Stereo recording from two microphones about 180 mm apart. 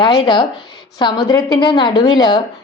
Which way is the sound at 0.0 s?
25° left (ahead or behind).